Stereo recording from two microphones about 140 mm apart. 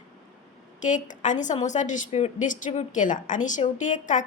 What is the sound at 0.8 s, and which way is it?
Speech, 65° left (ahead or behind).